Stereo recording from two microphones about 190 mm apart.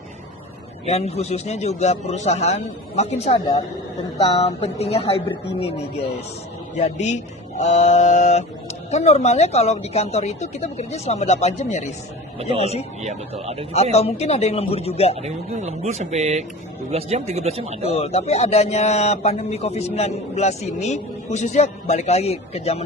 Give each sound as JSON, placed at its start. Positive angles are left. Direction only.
{"t": 0.9, "sound": "a man's voice", "side_deg": 35}
{"t": 13.0, "sound": "speech", "side_deg": -35}
{"t": 13.9, "sound": "a man's voice", "side_deg": 35}
{"t": 15.1, "sound": "speech", "side_deg": -35}
{"t": 17.8, "sound": "a man's voice", "side_deg": 35}